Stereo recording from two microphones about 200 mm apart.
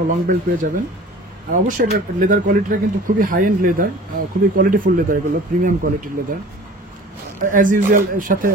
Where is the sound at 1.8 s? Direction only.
40° right (ahead or behind).